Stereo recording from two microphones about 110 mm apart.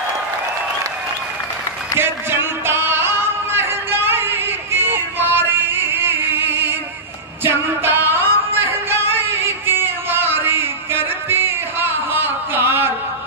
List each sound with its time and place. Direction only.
2.6 s music: 20° right (ahead or behind)